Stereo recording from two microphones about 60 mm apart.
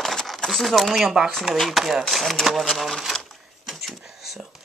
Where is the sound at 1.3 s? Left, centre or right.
Centre.